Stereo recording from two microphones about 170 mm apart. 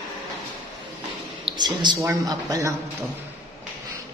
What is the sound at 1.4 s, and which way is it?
A woman's voice, 25° right (ahead or behind).